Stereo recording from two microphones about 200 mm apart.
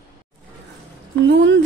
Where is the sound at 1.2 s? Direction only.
60° right (ahead or behind).